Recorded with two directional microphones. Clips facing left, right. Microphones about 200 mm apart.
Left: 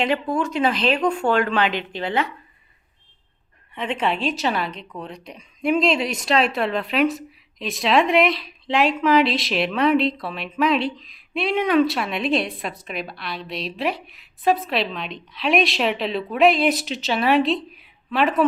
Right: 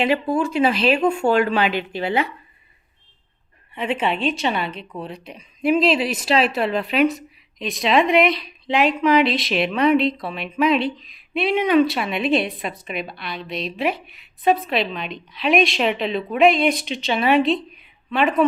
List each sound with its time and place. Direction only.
0.0 s speech: 10° right (ahead or behind)
3.8 s a woman's voice: 5° right (ahead or behind)